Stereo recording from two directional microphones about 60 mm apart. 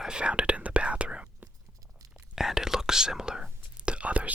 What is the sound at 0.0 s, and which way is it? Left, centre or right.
Whispering, centre.